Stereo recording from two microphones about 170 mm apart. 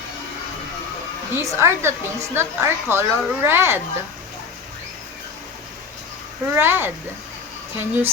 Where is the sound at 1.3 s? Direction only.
15° right (ahead or behind).